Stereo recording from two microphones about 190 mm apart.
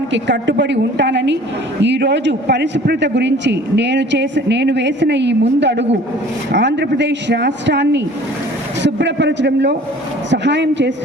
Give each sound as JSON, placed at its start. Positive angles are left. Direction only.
{"t": 0.1, "sound": "a woman's voice", "side_deg": -70}